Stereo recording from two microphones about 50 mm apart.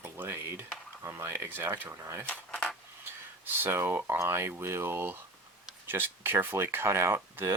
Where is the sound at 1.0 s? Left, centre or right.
Right.